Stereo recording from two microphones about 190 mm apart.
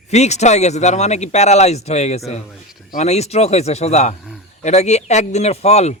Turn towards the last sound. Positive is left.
turn(degrees=35)  # may be behind; listen again after turning